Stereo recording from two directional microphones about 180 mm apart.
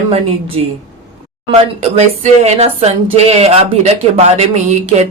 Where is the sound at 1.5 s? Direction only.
35° right (ahead or behind).